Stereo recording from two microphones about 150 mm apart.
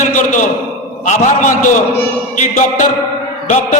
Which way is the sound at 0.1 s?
55° left (ahead or behind).